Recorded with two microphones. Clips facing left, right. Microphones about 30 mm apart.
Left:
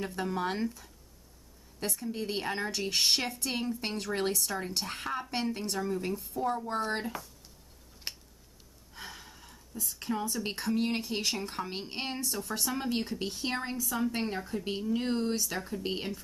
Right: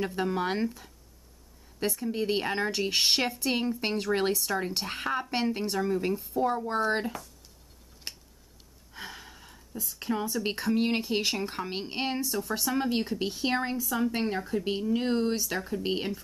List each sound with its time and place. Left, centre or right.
0.0 s speech: centre
2.0 s speech: right
8.1 s scissors: centre
8.9 s a sound: centre
10.7 s speech: centre